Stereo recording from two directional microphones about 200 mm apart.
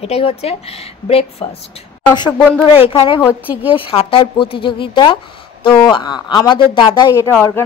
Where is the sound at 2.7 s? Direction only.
25° left (ahead or behind).